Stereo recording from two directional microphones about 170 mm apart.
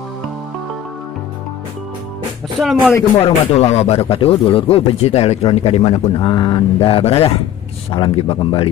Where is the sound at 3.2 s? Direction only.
40° left (ahead or behind).